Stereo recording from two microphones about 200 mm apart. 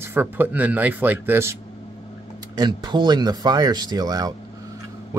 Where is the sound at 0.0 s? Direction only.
10° right (ahead or behind).